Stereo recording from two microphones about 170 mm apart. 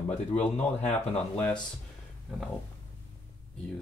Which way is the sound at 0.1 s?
40° left (ahead or behind).